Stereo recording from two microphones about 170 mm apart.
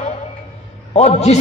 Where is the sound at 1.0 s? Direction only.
40° left (ahead or behind).